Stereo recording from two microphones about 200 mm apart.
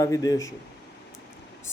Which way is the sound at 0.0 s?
20° left (ahead or behind).